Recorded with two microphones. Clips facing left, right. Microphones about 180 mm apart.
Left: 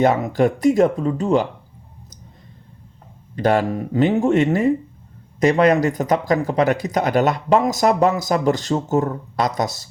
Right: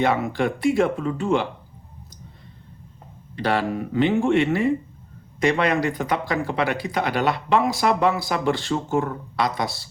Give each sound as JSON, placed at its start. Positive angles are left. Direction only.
{"t": 0.0, "sound": "speech", "side_deg": 40}
{"t": 3.3, "sound": "speech", "side_deg": 45}